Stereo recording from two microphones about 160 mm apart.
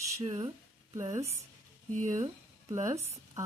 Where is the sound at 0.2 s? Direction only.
35° right (ahead or behind).